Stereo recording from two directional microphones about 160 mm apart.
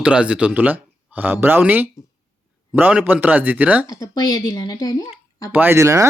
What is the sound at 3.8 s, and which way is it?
Speech, 20° left (ahead or behind).